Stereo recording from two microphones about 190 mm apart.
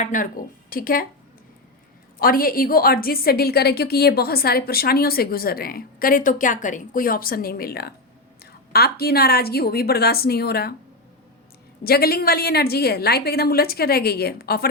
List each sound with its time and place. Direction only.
0.0 s a woman's voice: 45° left (ahead or behind)
2.1 s a woman's voice: 50° left (ahead or behind)
11.8 s a woman's voice: 55° left (ahead or behind)